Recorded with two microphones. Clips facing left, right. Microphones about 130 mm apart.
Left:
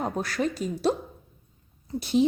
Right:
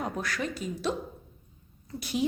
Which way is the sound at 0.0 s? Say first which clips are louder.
Left 5 dB; 35° left (ahead or behind).